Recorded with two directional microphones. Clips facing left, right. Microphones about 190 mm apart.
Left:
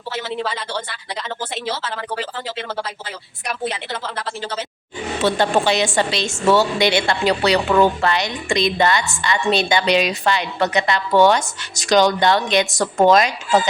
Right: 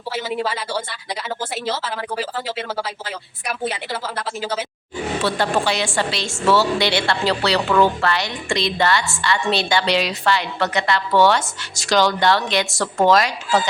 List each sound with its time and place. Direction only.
0.1 s speech: 10° right (ahead or behind)
5.2 s a woman's voice: 20° left (ahead or behind)